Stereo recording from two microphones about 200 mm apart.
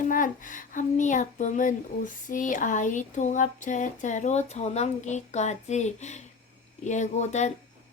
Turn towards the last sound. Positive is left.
turn(degrees=35)  # may be behind; listen again after turning